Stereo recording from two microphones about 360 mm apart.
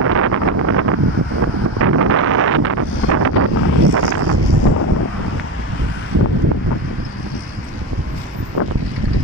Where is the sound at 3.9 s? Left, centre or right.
Right.